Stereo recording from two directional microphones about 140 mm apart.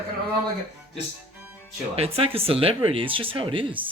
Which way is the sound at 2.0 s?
45° right (ahead or behind).